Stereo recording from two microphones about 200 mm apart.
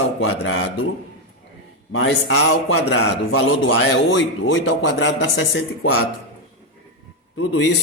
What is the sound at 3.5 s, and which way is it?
A man's voice, 70° left (ahead or behind).